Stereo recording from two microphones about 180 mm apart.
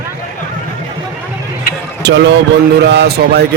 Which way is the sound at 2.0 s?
75° right (ahead or behind).